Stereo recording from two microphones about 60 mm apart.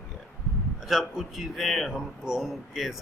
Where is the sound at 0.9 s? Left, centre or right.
Centre.